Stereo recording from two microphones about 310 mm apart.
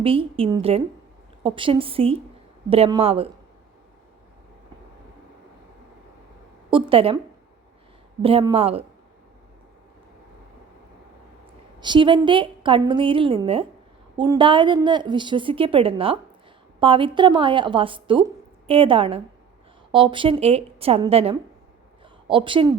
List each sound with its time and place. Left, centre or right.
0.0 s a woman's voice: centre
6.7 s a woman's voice: centre
8.2 s a woman's voice: centre
11.8 s a woman's voice: centre